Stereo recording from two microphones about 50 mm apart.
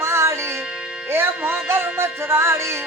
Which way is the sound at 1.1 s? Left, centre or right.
Right.